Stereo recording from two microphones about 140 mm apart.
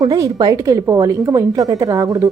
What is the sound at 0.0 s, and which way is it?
A woman's voice, 30° right (ahead or behind).